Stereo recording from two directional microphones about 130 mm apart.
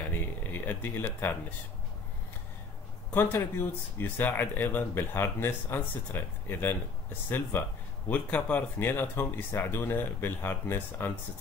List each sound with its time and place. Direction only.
0.0 s speech: 15° left (ahead or behind)
3.1 s speech: 15° left (ahead or behind)